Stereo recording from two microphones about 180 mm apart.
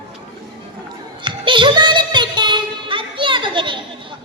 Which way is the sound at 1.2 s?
25° right (ahead or behind).